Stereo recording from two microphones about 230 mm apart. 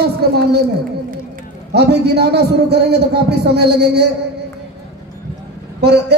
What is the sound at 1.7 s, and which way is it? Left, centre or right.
A man's voice, right.